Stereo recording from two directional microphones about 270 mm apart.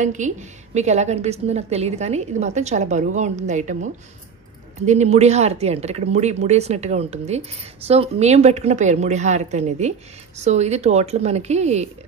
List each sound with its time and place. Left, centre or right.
0.0 s speech: right